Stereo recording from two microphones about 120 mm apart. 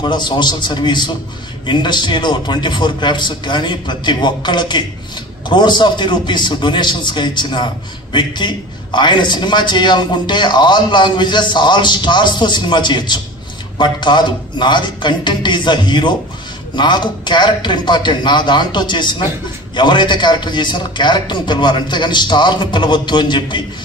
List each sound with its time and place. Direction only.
0.0 s a man's voice: 40° left (ahead or behind)